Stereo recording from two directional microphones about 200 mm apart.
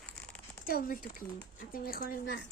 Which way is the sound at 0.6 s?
45° left (ahead or behind).